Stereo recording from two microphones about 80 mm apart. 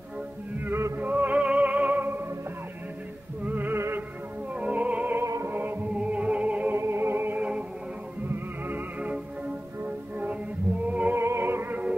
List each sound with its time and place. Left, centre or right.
0.6 s music: right
3.4 s music: right
4.6 s music: centre
5.2 s music: right
5.5 s music: right
5.9 s music: centre
6.8 s music: right
11.1 s music: right